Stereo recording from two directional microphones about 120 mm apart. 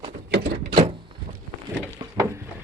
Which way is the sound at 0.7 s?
45° right (ahead or behind).